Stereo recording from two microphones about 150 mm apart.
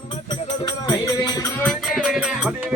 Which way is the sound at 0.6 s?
25° left (ahead or behind).